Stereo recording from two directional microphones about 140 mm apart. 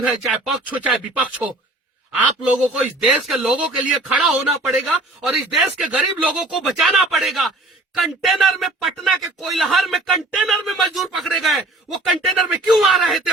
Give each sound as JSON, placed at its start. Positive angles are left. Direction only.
{"t": 0.0, "sound": "speech", "side_deg": -5}